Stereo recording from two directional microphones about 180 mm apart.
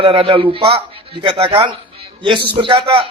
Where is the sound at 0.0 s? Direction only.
30° right (ahead or behind).